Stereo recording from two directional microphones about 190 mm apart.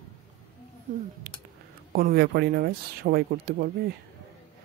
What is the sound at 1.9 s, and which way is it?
Speech, 55° right (ahead or behind).